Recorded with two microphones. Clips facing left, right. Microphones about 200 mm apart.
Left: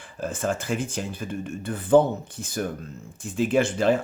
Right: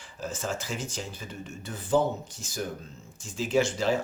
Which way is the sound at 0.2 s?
55° left (ahead or behind).